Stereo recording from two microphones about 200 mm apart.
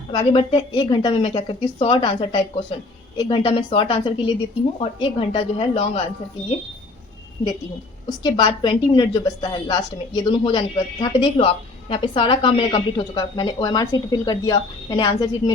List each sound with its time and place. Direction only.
0.1 s a woman's voice: 25° left (ahead or behind)
7.4 s a woman's voice: 25° left (ahead or behind)